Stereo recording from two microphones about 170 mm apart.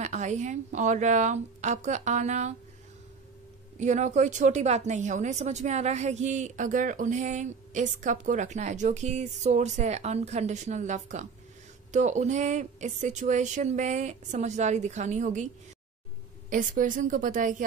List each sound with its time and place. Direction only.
0.0 s a woman's voice: 45° right (ahead or behind)
3.8 s a woman's voice: 45° right (ahead or behind)
16.4 s a woman's voice: 50° right (ahead or behind)